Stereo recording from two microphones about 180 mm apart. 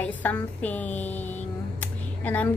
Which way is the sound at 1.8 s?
10° left (ahead or behind).